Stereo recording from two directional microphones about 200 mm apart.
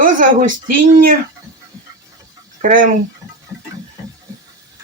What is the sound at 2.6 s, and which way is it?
Speech, 45° right (ahead or behind).